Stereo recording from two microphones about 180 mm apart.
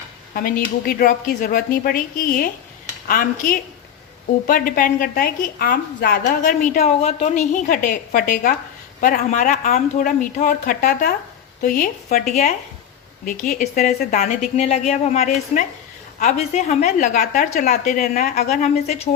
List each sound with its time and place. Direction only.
0.3 s a woman's voice: 50° left (ahead or behind)